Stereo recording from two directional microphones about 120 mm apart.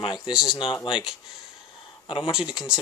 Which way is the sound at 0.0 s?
40° left (ahead or behind).